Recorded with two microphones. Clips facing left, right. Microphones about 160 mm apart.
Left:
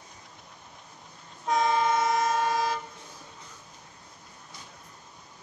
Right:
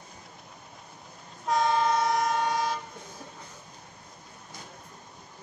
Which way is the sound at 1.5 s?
Centre (ahead or behind).